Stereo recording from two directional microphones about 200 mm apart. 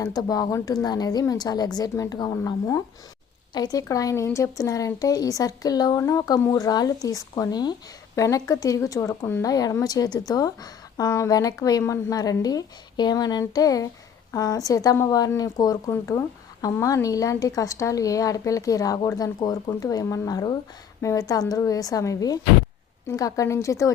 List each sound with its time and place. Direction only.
0.0 s a woman's voice: 20° left (ahead or behind)